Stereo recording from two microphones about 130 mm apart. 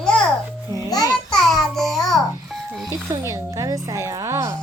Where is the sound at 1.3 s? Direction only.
5° left (ahead or behind).